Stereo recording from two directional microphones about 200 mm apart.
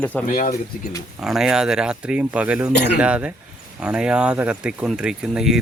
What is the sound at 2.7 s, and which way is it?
Speech, 55° left (ahead or behind).